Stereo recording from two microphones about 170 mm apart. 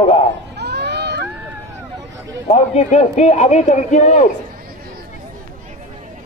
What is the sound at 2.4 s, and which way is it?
A man's voice, 40° left (ahead or behind).